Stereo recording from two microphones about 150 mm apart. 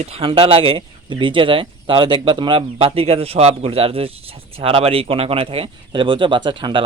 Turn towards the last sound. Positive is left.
turn(degrees=-35)  # may be behind; listen again after turning